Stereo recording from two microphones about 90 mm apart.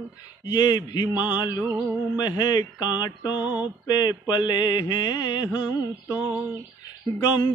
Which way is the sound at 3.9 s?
50° left (ahead or behind).